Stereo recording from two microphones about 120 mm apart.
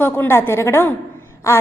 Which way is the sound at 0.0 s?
20° left (ahead or behind).